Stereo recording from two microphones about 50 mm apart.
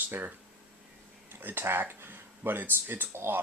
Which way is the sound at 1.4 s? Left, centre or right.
Right.